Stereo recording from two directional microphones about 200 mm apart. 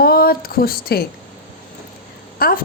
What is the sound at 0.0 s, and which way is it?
Speech, 50° left (ahead or behind).